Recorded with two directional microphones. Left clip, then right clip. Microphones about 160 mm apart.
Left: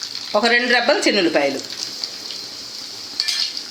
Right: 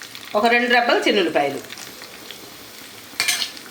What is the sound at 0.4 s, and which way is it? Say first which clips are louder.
Speech: even; 65° left (ahead or behind).